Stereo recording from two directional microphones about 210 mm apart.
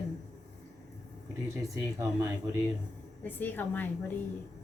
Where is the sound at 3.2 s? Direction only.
10° left (ahead or behind).